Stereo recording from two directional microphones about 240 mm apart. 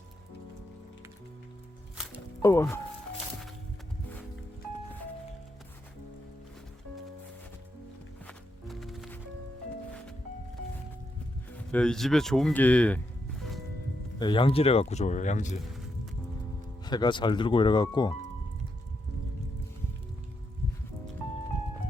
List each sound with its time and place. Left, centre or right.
2.4 s speech: centre
8.3 s music: centre
11.5 s speech: centre
14.2 s speech: centre
16.8 s speech: centre